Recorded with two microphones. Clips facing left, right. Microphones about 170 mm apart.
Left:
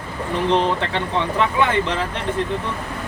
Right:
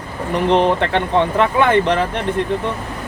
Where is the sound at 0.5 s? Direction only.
60° right (ahead or behind).